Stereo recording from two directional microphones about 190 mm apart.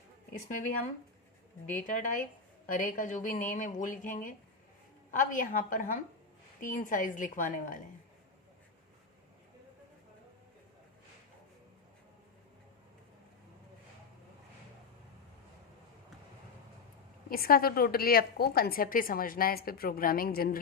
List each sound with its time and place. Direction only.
1.7 s a woman's voice: 40° left (ahead or behind)
17.2 s a woman's voice: 50° left (ahead or behind)